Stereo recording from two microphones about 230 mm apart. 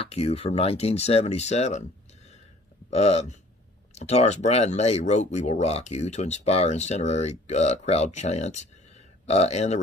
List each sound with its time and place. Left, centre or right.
0.1 s speech: left
2.9 s speech: left